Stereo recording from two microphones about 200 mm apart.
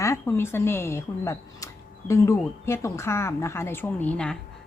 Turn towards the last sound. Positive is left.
turn(degrees=5)  # may be behind; listen again after turning